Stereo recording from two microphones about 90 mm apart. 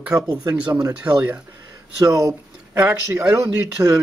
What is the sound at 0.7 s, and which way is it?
Speech, 45° right (ahead or behind).